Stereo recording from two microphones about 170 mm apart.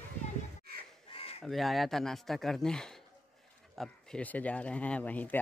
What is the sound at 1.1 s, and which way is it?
Caw, 35° left (ahead or behind).